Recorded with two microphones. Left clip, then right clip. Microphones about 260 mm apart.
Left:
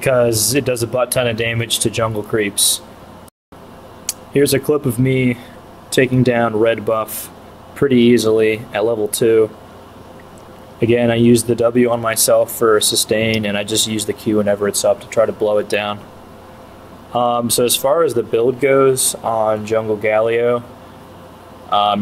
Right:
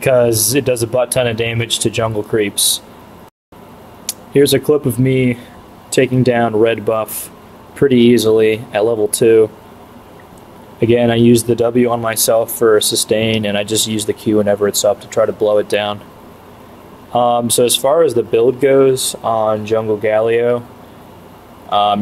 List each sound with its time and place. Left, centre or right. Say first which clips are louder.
0.0 s speech: right 2 dB; centre
4.0 s speech: right 3 dB; centre
10.8 s speech: right 2 dB; centre
17.1 s speech: right 3 dB; centre
21.6 s speech: right 1 dB; centre